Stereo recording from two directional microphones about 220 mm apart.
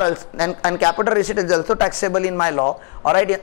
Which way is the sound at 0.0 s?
20° left (ahead or behind).